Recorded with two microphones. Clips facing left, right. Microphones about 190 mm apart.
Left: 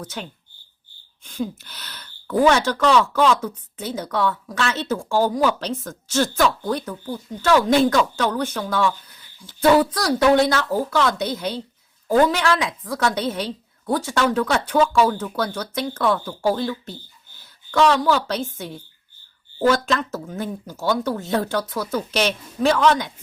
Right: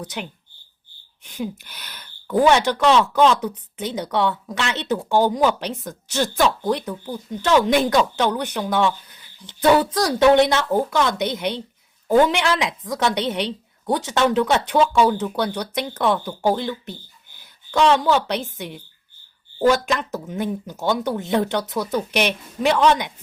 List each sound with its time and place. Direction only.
0.0 s speech: 15° right (ahead or behind)